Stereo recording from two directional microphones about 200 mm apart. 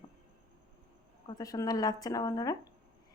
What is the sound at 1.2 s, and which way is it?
Speech, 20° left (ahead or behind).